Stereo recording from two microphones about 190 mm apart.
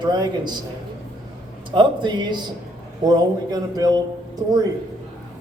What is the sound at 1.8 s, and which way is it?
A man's voice, 25° right (ahead or behind).